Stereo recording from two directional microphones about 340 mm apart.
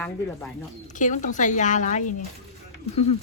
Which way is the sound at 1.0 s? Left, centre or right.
Left.